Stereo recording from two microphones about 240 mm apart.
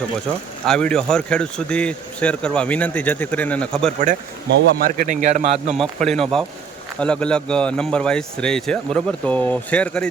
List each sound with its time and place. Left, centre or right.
0.6 s speech: centre
4.0 s a man's voice: right
5.7 s speech: centre